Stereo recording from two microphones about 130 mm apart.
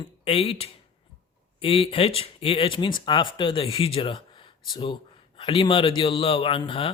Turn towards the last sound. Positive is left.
turn(degrees=45)  # may be behind; listen again after turning